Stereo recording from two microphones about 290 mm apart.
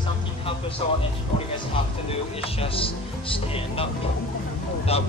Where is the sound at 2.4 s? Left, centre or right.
Centre.